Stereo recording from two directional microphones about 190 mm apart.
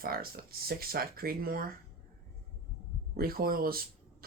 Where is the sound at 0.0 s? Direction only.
50° right (ahead or behind).